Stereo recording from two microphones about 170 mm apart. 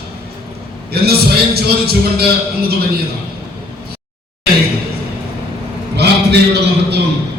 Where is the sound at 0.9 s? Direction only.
65° right (ahead or behind).